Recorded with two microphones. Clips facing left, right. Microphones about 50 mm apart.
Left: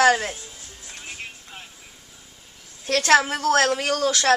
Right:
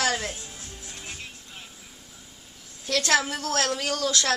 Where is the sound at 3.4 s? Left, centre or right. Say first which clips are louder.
Left 8 dB; left.